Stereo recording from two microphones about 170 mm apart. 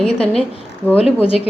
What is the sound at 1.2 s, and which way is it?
Speech, 35° left (ahead or behind).